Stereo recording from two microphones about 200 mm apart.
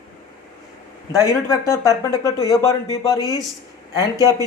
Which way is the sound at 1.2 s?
15° left (ahead or behind).